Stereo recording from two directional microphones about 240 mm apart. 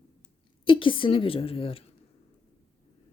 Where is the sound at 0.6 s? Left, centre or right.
Left.